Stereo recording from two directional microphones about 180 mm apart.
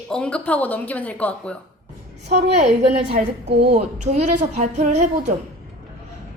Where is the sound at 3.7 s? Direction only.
40° right (ahead or behind).